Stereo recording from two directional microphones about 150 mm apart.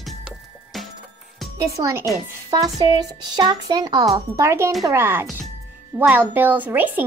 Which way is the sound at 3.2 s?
25° right (ahead or behind).